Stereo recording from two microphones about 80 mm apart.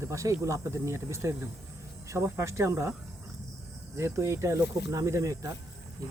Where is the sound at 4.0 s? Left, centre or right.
Right.